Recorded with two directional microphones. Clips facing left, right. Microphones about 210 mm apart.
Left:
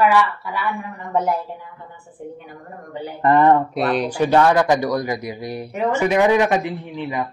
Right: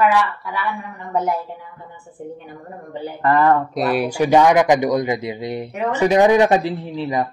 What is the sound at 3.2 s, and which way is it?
Speech, 20° left (ahead or behind).